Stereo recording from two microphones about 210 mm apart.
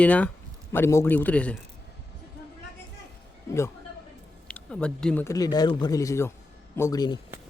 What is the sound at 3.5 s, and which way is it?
Speech, 10° left (ahead or behind).